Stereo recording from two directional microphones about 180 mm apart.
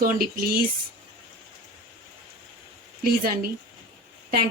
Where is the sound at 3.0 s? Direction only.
55° right (ahead or behind).